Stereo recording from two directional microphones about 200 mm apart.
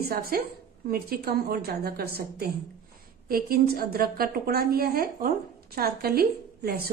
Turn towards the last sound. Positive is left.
turn(degrees=-50)  # may be behind; listen again after turning